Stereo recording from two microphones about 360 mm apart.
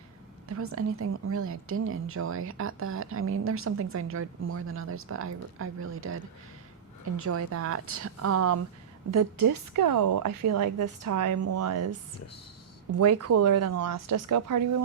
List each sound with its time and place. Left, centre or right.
0.4 s a woman's voice: right
7.3 s a woman's voice: right
13.0 s a woman's voice: right
13.8 s speech: right